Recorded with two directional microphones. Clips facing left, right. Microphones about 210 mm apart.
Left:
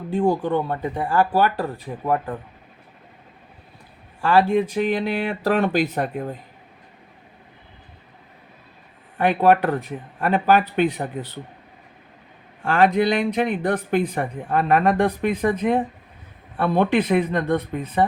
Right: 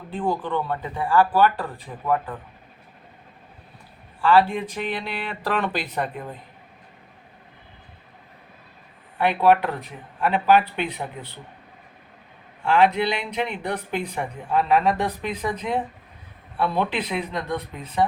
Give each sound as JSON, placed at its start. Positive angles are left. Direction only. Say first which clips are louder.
{"t": 0.1, "sound": "speech", "louder": "left 5 dB", "side_deg": 45}
{"t": 4.2, "sound": "speech", "louder": "left 1 dB", "side_deg": 45}
{"t": 9.1, "sound": "speech", "louder": "left 1 dB", "side_deg": 45}
{"t": 12.6, "sound": "speech", "louder": "left 2 dB", "side_deg": 50}